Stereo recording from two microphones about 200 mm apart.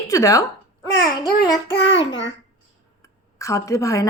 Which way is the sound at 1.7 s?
65° left (ahead or behind).